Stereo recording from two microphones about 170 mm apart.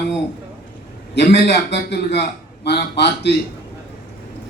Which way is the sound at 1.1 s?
75° left (ahead or behind).